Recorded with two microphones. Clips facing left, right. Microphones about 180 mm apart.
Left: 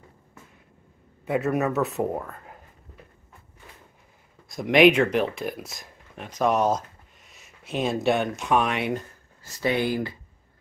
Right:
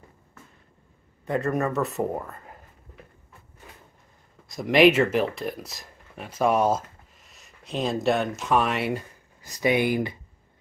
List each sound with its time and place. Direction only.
1.2 s speech: 5° left (ahead or behind)
4.5 s speech: centre (ahead or behind)
9.4 s speech: 15° right (ahead or behind)